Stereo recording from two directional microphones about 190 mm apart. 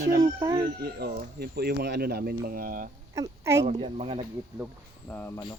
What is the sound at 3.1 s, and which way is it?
Speech, 15° right (ahead or behind).